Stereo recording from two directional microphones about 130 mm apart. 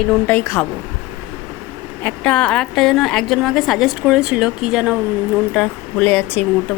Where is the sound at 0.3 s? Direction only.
20° left (ahead or behind).